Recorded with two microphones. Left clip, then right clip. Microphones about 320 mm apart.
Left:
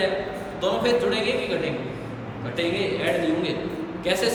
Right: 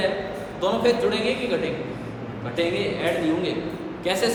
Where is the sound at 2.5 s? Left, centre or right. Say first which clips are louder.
Right 1 dB; centre.